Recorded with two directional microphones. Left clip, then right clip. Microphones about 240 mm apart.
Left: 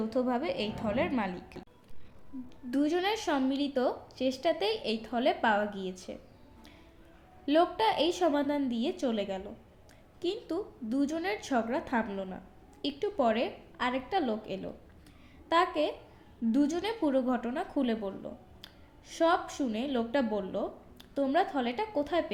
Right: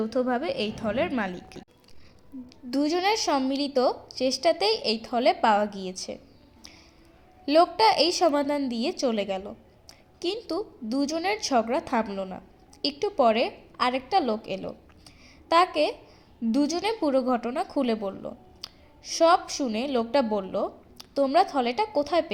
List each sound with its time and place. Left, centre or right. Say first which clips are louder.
0.0 s a woman's voice: right 5 dB; centre
2.6 s a woman's voice: right 5 dB; centre
7.4 s a woman's voice: right 7 dB; centre